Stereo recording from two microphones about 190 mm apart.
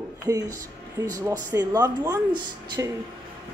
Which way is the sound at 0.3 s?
20° right (ahead or behind).